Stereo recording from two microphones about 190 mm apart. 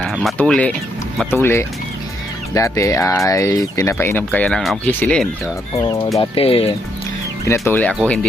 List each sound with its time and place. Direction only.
0.0 s speech: centre (ahead or behind)
5.7 s speech: 20° left (ahead or behind)
7.4 s speech: 15° left (ahead or behind)